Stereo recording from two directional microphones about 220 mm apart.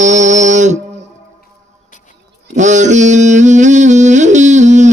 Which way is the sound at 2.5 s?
35° right (ahead or behind).